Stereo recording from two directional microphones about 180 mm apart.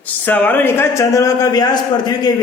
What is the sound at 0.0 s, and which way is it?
A man's voice, 10° left (ahead or behind).